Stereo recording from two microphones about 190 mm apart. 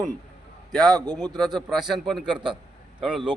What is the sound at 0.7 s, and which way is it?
Speech, centre (ahead or behind).